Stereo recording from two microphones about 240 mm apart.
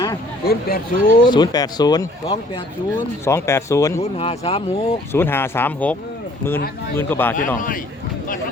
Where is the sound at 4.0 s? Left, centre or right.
Left.